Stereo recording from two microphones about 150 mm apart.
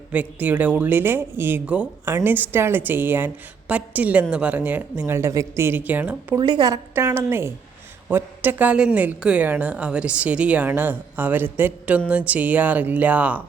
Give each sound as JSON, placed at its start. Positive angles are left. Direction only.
{"t": 0.1, "sound": "a woman's voice", "side_deg": -10}
{"t": 6.4, "sound": "a woman's voice", "side_deg": -25}
{"t": 6.9, "sound": "a woman's voice", "side_deg": -15}